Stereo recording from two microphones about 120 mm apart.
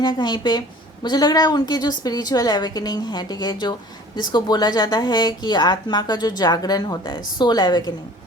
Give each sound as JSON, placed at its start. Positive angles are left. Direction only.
{"t": 0.0, "sound": "a woman's voice", "side_deg": 35}